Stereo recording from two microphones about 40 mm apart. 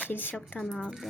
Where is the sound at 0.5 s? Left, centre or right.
Centre.